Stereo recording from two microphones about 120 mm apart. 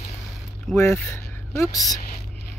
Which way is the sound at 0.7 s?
20° left (ahead or behind).